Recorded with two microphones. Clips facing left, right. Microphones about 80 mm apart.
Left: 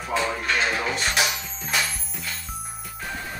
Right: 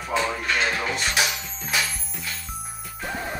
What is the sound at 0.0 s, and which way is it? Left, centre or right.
Music, centre.